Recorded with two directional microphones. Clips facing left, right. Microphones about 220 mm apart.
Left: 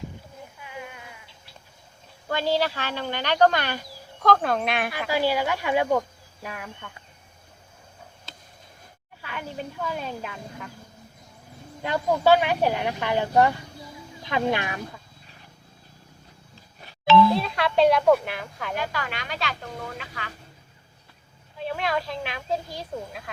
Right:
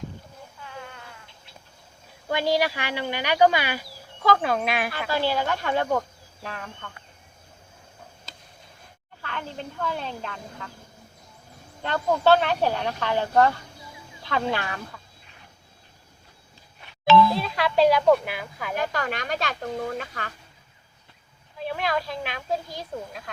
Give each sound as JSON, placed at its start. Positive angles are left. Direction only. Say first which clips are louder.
{"t": 0.6, "sound": "a sound", "louder": "left 1 dB", "side_deg": 15}
{"t": 2.3, "sound": "speech", "louder": "right 1 dB", "side_deg": -15}
{"t": 4.9, "sound": "speech", "louder": "left 1 dB", "side_deg": 10}
{"t": 9.2, "sound": "speech", "louder": "left 1 dB", "side_deg": 10}
{"t": 11.8, "sound": "speech", "louder": "even", "side_deg": 10}
{"t": 17.3, "sound": "speech", "louder": "even", "side_deg": 0}
{"t": 18.8, "sound": "a woman's voice", "louder": "right 5 dB", "side_deg": -45}
{"t": 21.6, "sound": "speech", "louder": "even", "side_deg": 0}